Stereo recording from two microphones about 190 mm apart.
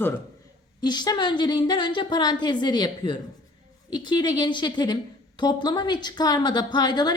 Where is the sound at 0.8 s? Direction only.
20° left (ahead or behind).